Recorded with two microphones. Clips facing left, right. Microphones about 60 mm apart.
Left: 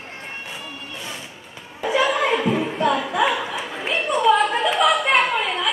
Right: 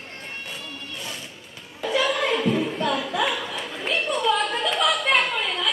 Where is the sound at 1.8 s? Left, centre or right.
Centre.